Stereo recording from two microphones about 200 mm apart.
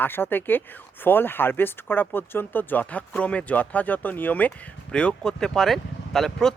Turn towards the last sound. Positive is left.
turn(degrees=0)  # may be behind; listen again after turning